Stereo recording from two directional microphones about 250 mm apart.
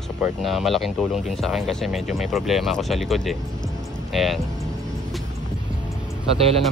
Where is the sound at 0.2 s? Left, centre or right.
Centre.